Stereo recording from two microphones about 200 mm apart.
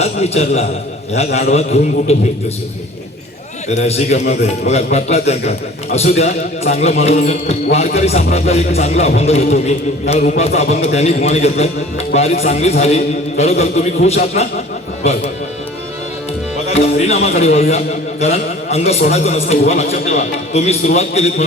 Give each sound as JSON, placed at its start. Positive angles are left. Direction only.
{"t": 0.0, "sound": "a man's voice", "side_deg": 30}
{"t": 3.8, "sound": "a man's voice", "side_deg": 30}
{"t": 16.6, "sound": "a man's voice", "side_deg": 30}